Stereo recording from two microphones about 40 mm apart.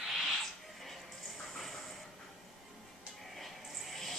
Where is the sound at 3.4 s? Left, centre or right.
Centre.